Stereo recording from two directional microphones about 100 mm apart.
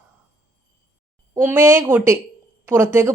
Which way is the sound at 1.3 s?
25° right (ahead or behind).